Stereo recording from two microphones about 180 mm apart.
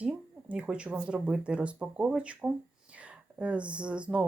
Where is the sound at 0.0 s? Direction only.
10° right (ahead or behind).